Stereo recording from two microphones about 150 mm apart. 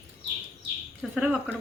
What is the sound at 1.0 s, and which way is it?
Speech, 5° right (ahead or behind).